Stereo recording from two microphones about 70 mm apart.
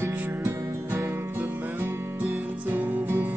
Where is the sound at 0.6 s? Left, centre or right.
Right.